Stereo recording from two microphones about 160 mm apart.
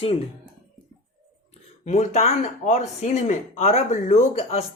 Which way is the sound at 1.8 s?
45° left (ahead or behind).